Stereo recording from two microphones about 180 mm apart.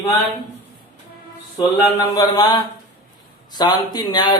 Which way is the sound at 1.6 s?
20° left (ahead or behind).